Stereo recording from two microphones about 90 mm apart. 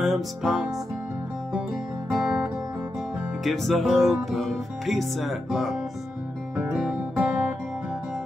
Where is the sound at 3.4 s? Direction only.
Centre (ahead or behind).